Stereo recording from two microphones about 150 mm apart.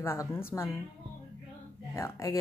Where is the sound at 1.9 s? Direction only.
20° left (ahead or behind).